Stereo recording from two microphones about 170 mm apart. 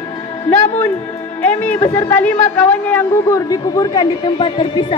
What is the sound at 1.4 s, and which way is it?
A woman's voice, 10° left (ahead or behind).